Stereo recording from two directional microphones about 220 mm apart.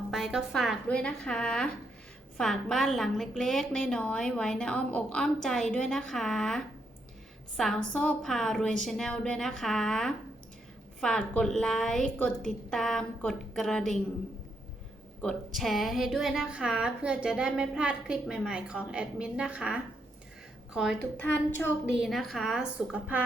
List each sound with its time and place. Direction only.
0.1 s speech: centre (ahead or behind)
15.2 s speech: centre (ahead or behind)
22.0 s speech: centre (ahead or behind)